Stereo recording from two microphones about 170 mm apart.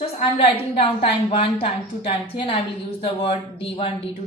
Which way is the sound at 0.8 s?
30° left (ahead or behind).